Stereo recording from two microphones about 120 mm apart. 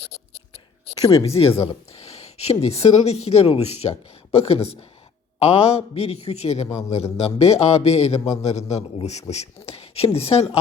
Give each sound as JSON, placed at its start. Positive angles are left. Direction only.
{"t": 1.4, "sound": "speech", "side_deg": 50}
{"t": 9.6, "sound": "a sound", "side_deg": 55}
{"t": 10.2, "sound": "speech", "side_deg": 55}